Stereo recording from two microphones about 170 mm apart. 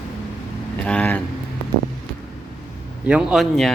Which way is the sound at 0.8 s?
10° left (ahead or behind).